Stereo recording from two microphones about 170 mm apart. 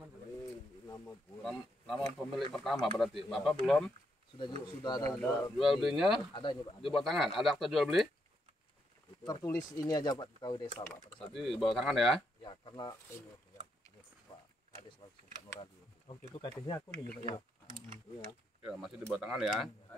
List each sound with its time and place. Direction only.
1.0 s speech: centre (ahead or behind)
4.8 s speech: 25° left (ahead or behind)
5.6 s speech: centre (ahead or behind)
6.3 s speech: 25° left (ahead or behind)
6.9 s speech: centre (ahead or behind)
9.2 s speech: 20° left (ahead or behind)
10.9 s speech: 10° left (ahead or behind)
11.3 s speech: centre (ahead or behind)
12.4 s speech: 25° left (ahead or behind)
14.3 s a sound: 30° left (ahead or behind)
15.6 s speech: 30° left (ahead or behind)
17.3 s speech: 30° right (ahead or behind)
18.6 s speech: centre (ahead or behind)